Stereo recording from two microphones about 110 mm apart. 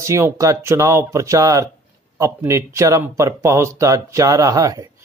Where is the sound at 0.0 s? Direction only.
25° right (ahead or behind).